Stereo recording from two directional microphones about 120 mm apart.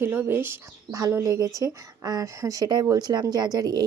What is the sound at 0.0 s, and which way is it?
A woman's voice, 15° right (ahead or behind).